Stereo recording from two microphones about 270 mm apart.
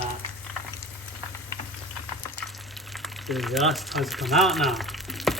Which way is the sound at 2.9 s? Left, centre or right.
Centre.